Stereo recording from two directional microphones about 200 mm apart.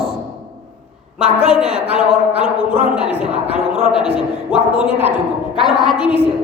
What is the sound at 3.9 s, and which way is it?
A woman's voice, 5° right (ahead or behind).